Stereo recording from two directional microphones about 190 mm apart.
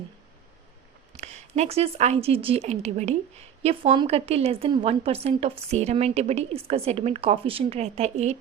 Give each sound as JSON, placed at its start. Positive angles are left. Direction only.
{"t": 1.1, "sound": "a woman's voice", "side_deg": -35}